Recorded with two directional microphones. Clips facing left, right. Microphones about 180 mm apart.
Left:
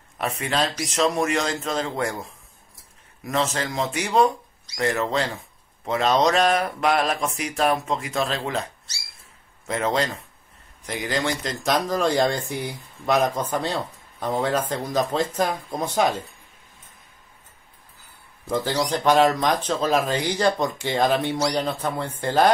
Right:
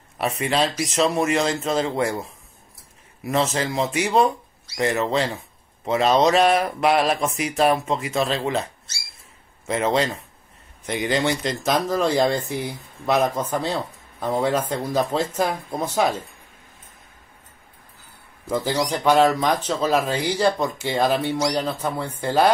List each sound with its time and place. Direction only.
0.2 s speech: 5° right (ahead or behind)
3.3 s speech: 5° right (ahead or behind)
9.7 s speech: 5° right (ahead or behind)
11.2 s speech: 5° right (ahead or behind)
18.5 s speech: 10° right (ahead or behind)